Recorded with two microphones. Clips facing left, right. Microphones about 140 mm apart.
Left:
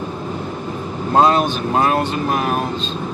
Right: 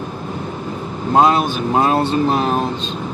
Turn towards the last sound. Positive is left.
turn(degrees=-25)  # may be behind; listen again after turning